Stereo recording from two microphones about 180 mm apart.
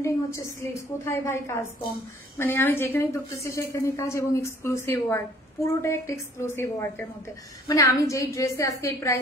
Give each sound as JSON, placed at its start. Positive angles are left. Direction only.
{"t": 0.0, "sound": "a woman's voice", "side_deg": 15}